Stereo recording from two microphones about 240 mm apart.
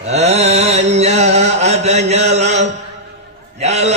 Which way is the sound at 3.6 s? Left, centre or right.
Right.